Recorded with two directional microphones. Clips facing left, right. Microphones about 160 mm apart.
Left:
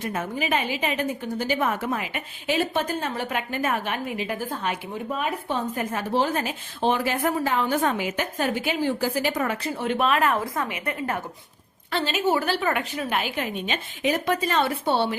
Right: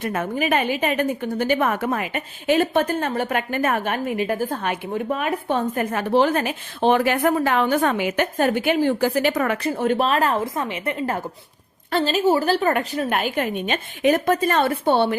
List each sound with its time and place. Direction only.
0.0 s a woman's voice: 55° right (ahead or behind)
10.0 s a woman's voice: 35° right (ahead or behind)
11.9 s a woman's voice: 40° right (ahead or behind)